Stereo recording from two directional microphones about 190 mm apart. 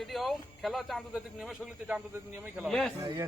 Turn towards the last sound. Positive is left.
turn(degrees=-15)  # may be behind; listen again after turning